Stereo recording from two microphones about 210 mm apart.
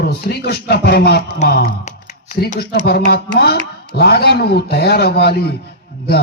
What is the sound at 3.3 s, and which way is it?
A man's voice, 50° left (ahead or behind).